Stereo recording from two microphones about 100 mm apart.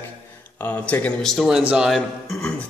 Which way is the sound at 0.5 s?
15° left (ahead or behind).